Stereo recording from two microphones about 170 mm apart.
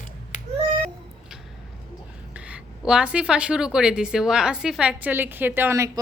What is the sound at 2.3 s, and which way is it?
A woman's voice, 5° right (ahead or behind).